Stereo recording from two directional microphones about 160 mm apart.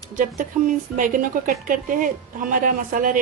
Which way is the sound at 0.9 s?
55° right (ahead or behind).